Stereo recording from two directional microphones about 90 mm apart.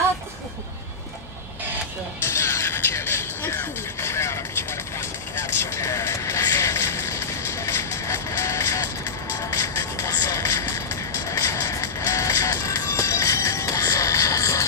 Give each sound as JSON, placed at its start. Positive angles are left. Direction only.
{"t": 2.3, "sound": "vehicle", "side_deg": 30}
{"t": 9.5, "sound": "music", "side_deg": 35}